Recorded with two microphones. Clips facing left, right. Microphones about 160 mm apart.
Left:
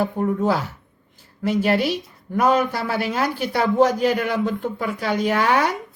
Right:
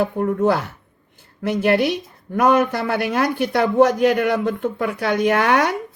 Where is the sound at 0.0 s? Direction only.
60° right (ahead or behind).